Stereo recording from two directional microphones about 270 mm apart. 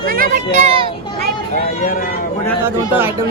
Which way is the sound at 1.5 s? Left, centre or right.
Left.